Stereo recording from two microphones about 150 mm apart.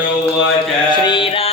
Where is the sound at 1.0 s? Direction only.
35° left (ahead or behind).